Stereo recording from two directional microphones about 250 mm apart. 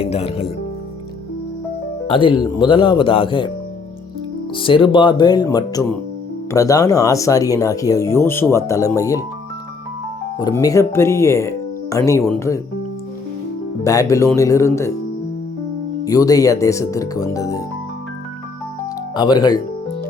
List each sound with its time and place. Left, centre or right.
0.0 s speech: left
2.0 s speech: centre
4.5 s speech: left
10.4 s speech: centre
13.8 s speech: centre
16.0 s speech: centre
19.1 s speech: centre